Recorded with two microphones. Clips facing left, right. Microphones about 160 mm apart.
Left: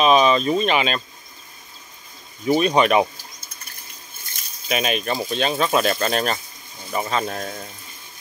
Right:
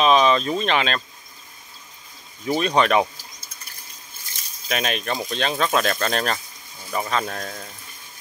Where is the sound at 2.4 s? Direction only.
5° left (ahead or behind).